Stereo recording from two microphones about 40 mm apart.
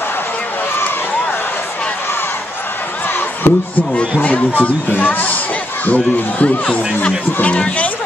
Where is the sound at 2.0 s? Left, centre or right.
Left.